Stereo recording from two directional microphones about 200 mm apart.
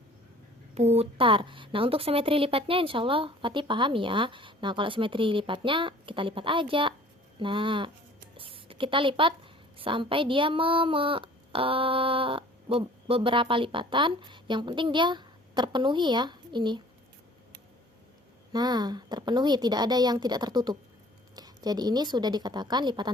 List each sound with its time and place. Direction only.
0.7 s a woman's voice: 30° right (ahead or behind)
18.5 s a woman's voice: 20° right (ahead or behind)